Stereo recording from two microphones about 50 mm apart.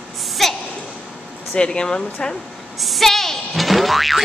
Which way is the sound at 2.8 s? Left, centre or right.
Centre.